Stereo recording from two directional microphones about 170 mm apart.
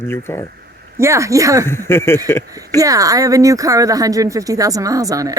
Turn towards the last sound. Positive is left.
turn(degrees=-20)  # may be behind; listen again after turning